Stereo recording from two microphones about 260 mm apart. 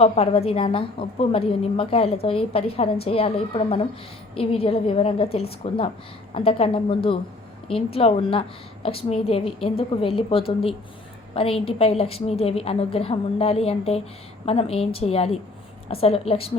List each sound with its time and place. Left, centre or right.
0.0 s a woman's voice: left